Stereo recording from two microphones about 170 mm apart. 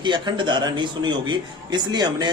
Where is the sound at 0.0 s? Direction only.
25° right (ahead or behind).